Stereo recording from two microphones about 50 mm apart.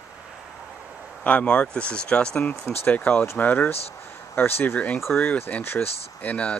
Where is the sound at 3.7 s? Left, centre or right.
Left.